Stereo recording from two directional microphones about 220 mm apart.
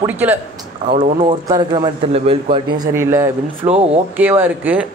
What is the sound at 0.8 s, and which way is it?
A man's voice, 35° right (ahead or behind).